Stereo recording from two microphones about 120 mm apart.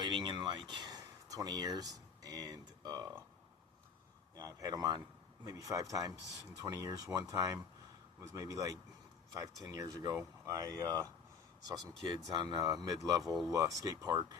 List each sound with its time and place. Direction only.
0.0 s a sound: 40° right (ahead or behind)
0.7 s speech: 35° right (ahead or behind)
4.4 s speech: 30° right (ahead or behind)
12.4 s speech: 35° right (ahead or behind)
13.2 s speech: centre (ahead or behind)
13.5 s speech: 25° right (ahead or behind)